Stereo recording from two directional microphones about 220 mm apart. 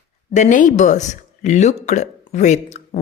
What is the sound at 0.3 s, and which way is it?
Speech, 35° left (ahead or behind).